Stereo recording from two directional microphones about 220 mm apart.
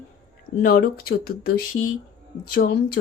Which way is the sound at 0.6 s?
45° left (ahead or behind).